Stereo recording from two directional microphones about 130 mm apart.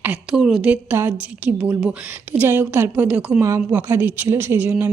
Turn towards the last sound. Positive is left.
turn(degrees=-15)  # may be behind; listen again after turning